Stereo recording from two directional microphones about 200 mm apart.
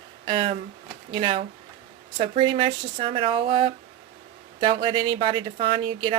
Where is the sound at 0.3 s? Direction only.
25° right (ahead or behind).